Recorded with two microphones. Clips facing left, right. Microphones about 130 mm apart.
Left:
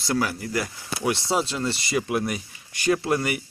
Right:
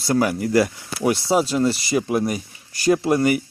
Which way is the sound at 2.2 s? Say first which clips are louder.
Right 4 dB; 40° right (ahead or behind).